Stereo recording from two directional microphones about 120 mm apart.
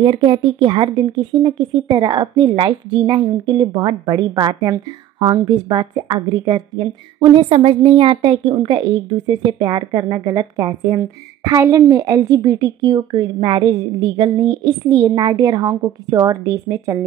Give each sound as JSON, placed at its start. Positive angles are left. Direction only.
{"t": 0.0, "sound": "a woman's voice", "side_deg": -45}
{"t": 7.3, "sound": "a woman's voice", "side_deg": -50}